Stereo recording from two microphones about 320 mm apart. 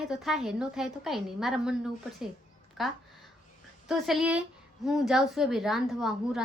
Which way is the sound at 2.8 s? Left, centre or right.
Centre.